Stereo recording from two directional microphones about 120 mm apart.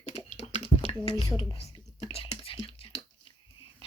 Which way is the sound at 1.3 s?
30° left (ahead or behind).